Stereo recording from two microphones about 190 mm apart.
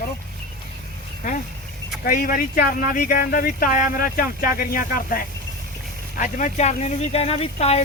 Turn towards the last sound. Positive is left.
turn(degrees=35)  # may be behind; listen again after turning